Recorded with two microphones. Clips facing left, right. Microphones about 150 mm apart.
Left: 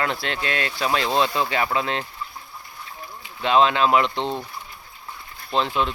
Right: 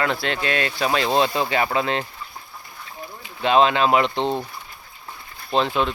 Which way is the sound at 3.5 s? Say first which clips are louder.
Right 1 dB; 15° right (ahead or behind).